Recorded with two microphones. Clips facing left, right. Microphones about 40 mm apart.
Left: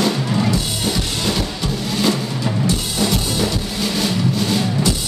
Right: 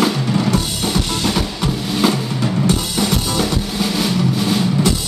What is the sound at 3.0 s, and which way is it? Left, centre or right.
Music, centre.